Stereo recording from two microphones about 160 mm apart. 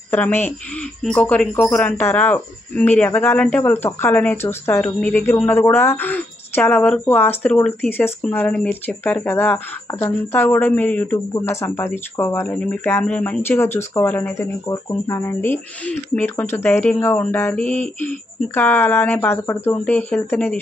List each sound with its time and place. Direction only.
0.1 s speech: 15° left (ahead or behind)